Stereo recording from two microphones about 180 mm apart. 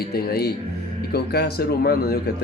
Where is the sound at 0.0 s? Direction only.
60° left (ahead or behind).